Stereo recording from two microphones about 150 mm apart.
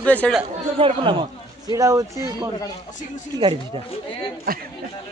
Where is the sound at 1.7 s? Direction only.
25° right (ahead or behind).